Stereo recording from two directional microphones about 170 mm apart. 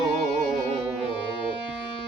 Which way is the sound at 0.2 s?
45° right (ahead or behind).